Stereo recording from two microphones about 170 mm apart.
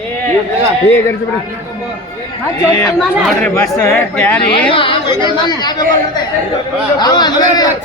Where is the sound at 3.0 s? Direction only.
Centre (ahead or behind).